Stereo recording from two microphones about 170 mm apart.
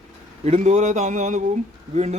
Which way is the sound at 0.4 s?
40° right (ahead or behind).